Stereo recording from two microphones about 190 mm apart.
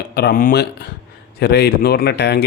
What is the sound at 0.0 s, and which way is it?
Speech, 55° left (ahead or behind).